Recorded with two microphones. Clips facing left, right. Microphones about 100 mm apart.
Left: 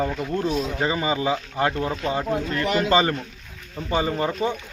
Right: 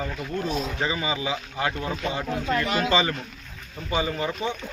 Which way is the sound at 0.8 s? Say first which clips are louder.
Left 6 dB; 40° left (ahead or behind).